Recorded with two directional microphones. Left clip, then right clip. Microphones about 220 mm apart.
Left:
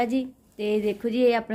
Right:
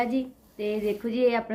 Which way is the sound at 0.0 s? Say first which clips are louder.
Left 2 dB; 50° left (ahead or behind).